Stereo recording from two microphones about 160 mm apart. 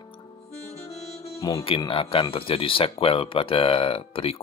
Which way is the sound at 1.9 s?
35° left (ahead or behind).